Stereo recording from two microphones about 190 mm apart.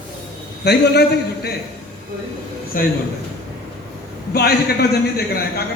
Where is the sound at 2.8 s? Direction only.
45° left (ahead or behind).